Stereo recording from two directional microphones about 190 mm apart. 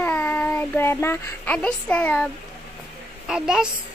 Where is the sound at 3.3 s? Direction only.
5° right (ahead or behind).